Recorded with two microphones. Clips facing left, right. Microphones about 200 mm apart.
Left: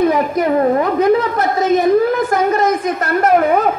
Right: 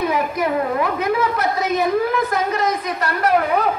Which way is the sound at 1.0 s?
50° left (ahead or behind).